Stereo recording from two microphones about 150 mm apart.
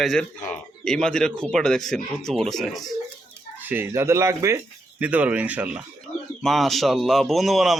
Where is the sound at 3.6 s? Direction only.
15° right (ahead or behind).